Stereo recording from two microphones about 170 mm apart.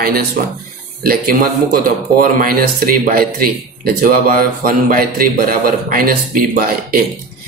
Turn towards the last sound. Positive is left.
turn(degrees=-60)  # may be behind; listen again after turning